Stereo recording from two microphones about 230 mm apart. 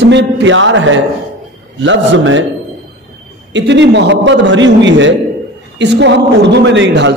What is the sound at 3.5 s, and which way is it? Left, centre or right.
A man's voice, right.